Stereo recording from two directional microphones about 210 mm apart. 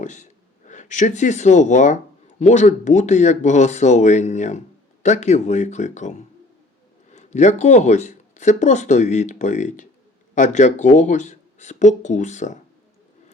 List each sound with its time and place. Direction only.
0.0 s speech: 35° left (ahead or behind)